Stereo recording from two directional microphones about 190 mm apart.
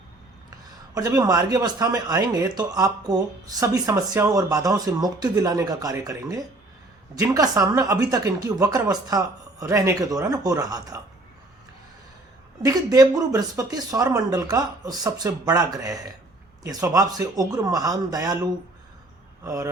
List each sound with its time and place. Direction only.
0.9 s a woman's voice: 20° right (ahead or behind)
12.6 s speech: 20° right (ahead or behind)